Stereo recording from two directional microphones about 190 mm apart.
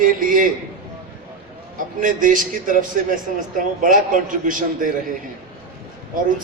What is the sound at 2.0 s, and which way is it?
A man's voice, 45° right (ahead or behind).